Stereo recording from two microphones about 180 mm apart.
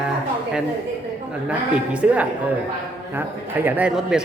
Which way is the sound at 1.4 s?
5° right (ahead or behind).